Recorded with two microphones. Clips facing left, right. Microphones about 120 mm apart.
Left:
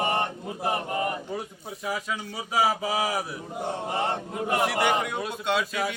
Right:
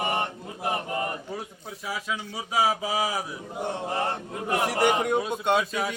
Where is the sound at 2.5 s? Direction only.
10° right (ahead or behind).